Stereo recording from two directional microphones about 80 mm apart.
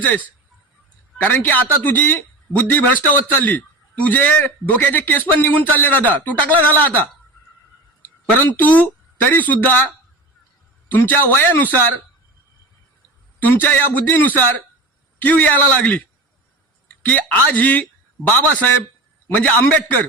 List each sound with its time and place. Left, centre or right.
1.2 s speech: left
8.4 s speech: left
10.9 s speech: left
13.4 s speech: left
17.1 s speech: centre